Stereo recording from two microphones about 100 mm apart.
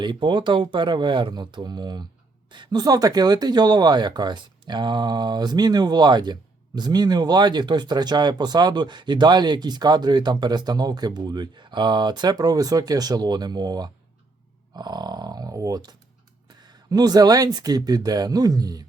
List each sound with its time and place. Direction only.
0.0 s speech: 50° right (ahead or behind)